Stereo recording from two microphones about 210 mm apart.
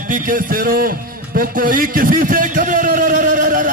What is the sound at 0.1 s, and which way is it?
A man's voice, 40° right (ahead or behind).